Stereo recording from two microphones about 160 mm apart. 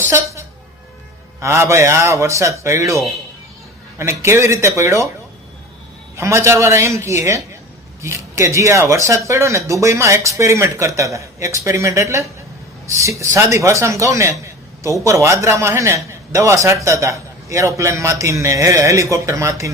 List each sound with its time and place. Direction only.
1.4 s speech: 15° right (ahead or behind)
6.1 s speech: 15° right (ahead or behind)